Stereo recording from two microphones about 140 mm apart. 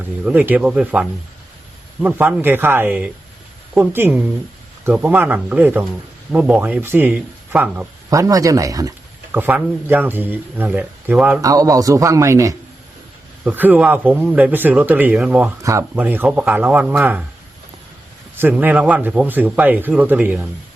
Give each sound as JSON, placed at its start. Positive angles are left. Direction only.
{"t": 0.3, "sound": "speech", "side_deg": -10}
{"t": 8.1, "sound": "a man's voice", "side_deg": -25}
{"t": 9.3, "sound": "speech", "side_deg": -15}
{"t": 11.3, "sound": "a man's voice", "side_deg": -25}
{"t": 15.6, "sound": "a man's voice", "side_deg": -20}
{"t": 18.3, "sound": "speech", "side_deg": -15}